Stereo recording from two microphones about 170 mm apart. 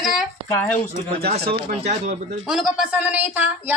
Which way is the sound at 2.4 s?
Centre (ahead or behind).